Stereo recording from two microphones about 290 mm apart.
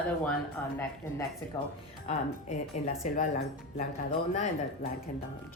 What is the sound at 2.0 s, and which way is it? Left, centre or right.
Speech, left.